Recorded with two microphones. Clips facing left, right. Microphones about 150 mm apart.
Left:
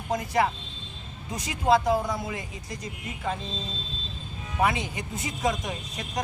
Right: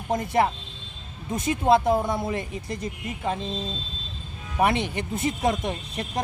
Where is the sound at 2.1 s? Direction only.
55° right (ahead or behind).